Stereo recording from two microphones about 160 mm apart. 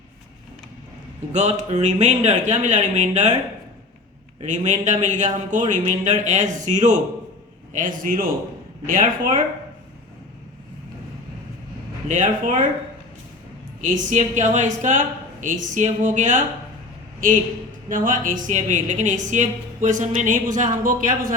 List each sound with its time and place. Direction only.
1.3 s speech: 45° right (ahead or behind)
4.4 s a man's voice: 50° right (ahead or behind)
12.0 s speech: 55° right (ahead or behind)
13.9 s a man's voice: 50° right (ahead or behind)